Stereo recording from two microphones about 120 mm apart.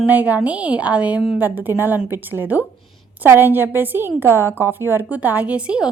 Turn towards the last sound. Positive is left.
turn(degrees=-10)  # may be behind; listen again after turning